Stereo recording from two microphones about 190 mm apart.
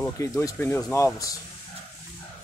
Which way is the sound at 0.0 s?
15° left (ahead or behind).